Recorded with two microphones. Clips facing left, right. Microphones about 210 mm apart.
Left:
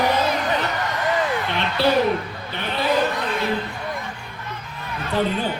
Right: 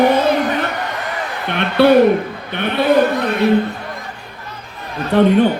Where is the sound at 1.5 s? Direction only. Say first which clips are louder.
Right 13 dB; 60° right (ahead or behind).